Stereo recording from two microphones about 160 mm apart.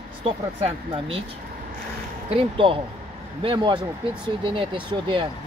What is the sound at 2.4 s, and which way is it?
Speech, 30° right (ahead or behind).